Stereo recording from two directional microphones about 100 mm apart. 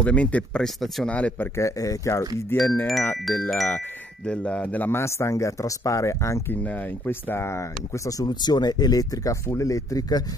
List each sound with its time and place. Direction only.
0.0 s speech: 15° left (ahead or behind)
0.7 s speech: centre (ahead or behind)
1.1 s speech: 15° left (ahead or behind)
1.6 s speech: 35° left (ahead or behind)
2.6 s speech: 20° left (ahead or behind)
3.4 s speech: centre (ahead or behind)
4.3 s speech: 10° left (ahead or behind); by 6.4 s 30° left (ahead or behind)
6.5 s speech: 20° left (ahead or behind)
8.2 s speech: 45° left (ahead or behind)